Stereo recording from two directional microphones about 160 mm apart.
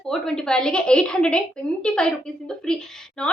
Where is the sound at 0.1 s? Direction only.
5° left (ahead or behind).